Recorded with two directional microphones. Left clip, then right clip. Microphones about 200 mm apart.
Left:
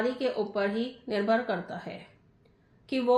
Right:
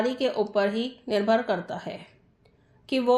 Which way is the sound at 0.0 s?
40° right (ahead or behind).